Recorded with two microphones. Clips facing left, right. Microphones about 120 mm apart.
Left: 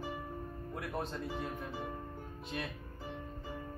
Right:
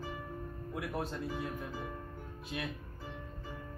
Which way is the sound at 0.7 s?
5° right (ahead or behind).